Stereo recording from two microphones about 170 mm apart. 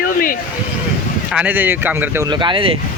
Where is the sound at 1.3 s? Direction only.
10° right (ahead or behind).